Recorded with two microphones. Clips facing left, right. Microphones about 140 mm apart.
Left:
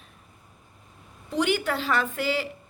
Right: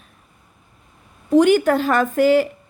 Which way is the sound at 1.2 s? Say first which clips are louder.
Right 12 dB; 45° right (ahead or behind).